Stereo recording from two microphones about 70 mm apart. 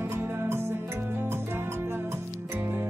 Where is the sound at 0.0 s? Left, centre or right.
Right.